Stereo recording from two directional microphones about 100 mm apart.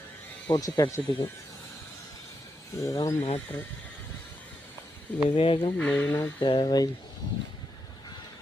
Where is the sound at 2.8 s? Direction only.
35° left (ahead or behind).